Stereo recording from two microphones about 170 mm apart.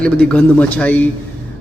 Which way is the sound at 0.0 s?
5° left (ahead or behind).